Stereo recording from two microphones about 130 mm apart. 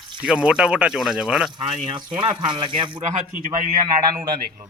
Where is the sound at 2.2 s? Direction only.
40° right (ahead or behind).